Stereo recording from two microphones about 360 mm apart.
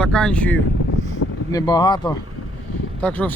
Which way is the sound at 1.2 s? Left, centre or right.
Left.